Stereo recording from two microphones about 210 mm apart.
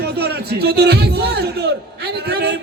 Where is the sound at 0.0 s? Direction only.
50° right (ahead or behind).